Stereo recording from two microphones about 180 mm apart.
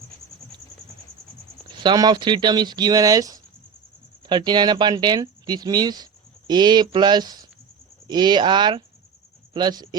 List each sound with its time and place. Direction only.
1.8 s speech: 25° right (ahead or behind)